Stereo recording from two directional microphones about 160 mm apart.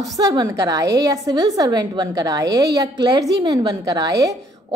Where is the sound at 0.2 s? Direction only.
25° right (ahead or behind).